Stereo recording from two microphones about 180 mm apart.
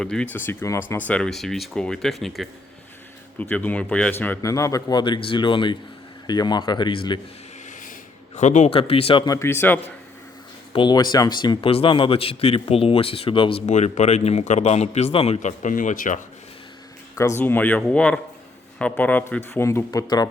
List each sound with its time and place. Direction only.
0.0 s a man's voice: 5° left (ahead or behind); by 7.2 s 25° left (ahead or behind)
8.4 s a man's voice: 40° left (ahead or behind); by 9.8 s 10° left (ahead or behind)
10.7 s speech: 25° left (ahead or behind)
13.7 s speech: 40° left (ahead or behind)
17.2 s a man's voice: 15° left (ahead or behind)